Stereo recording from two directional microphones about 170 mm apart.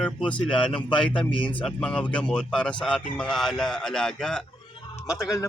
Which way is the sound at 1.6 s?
5° left (ahead or behind).